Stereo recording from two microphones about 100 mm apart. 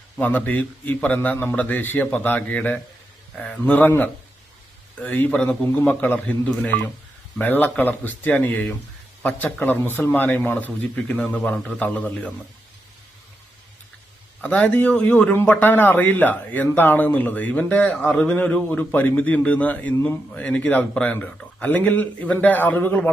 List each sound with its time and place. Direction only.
0.2 s a man's voice: 15° left (ahead or behind)
3.6 s a man's voice: 15° left (ahead or behind)
14.4 s a man's voice: 15° left (ahead or behind)